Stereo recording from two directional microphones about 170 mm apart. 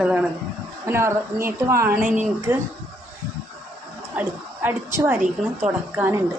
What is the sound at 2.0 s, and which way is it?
Speech, 50° right (ahead or behind).